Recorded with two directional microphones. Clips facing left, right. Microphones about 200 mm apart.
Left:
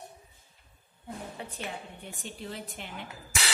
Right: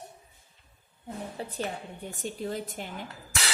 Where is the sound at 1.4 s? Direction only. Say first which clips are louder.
Right 5 dB; 35° right (ahead or behind).